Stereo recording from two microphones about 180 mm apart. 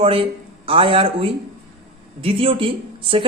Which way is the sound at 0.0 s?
30° right (ahead or behind).